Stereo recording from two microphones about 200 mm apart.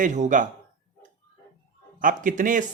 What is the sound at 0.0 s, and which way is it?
Speech, 40° right (ahead or behind).